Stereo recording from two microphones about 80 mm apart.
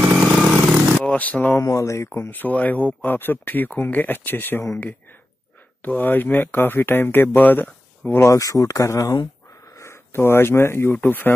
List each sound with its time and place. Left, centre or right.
0.1 s vehicle: centre
1.0 s speech: centre
1.6 s speech: left
5.8 s speech: left
8.2 s speech: left
9.8 s speech: left